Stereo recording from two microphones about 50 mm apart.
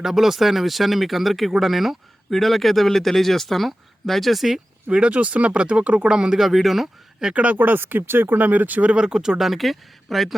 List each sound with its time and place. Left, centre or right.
0.0 s speech: centre
4.9 s speech: right
6.1 s speech: centre
6.4 s speech: centre
7.3 s speech: right; by 9.4 s centre
9.4 s speech: centre